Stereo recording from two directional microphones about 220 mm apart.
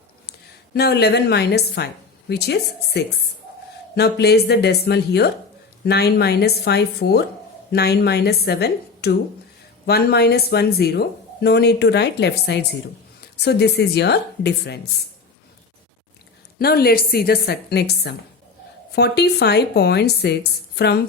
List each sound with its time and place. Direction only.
0.3 s a woman's voice: 45° left (ahead or behind)
16.6 s speech: 45° left (ahead or behind)